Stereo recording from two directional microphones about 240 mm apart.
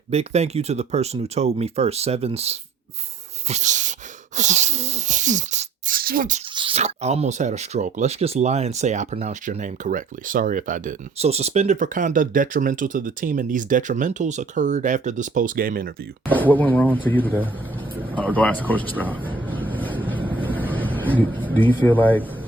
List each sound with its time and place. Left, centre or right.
0.1 s speech: right
3.5 s dog: right
4.4 s a sound: right
6.5 s speech: right
16.3 s speech: centre
18.7 s speech: centre
19.5 s vehicle: centre
20.7 s vehicle: centre
21.4 s speech: centre